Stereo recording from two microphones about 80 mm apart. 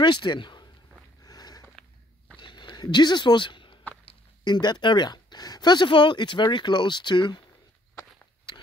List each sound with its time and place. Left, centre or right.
0.0 s speech: left
1.2 s sniff: left
2.4 s a sound: left
4.5 s speech: left